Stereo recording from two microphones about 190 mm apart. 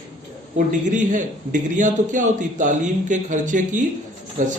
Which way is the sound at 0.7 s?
40° right (ahead or behind).